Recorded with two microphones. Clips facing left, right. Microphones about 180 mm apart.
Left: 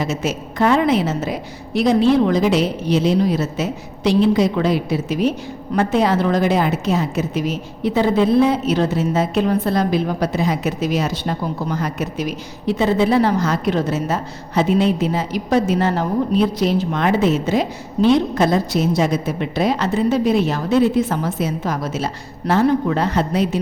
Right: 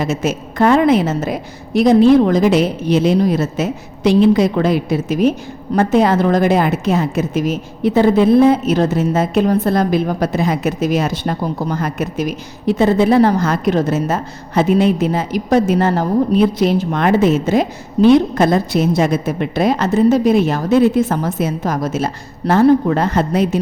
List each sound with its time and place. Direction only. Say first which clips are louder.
0.0 s a woman's voice: right 3 dB; 50° right (ahead or behind)